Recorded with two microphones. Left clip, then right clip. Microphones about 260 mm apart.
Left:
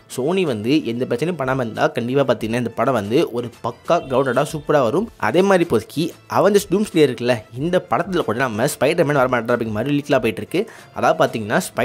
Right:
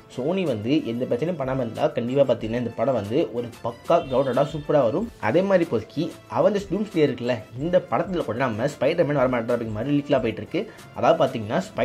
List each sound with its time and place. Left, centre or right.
0.3 s speech: left